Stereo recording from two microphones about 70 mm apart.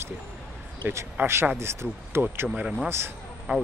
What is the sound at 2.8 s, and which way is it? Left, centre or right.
Speech, right.